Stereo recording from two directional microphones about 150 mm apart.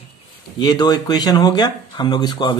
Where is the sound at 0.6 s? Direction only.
25° left (ahead or behind).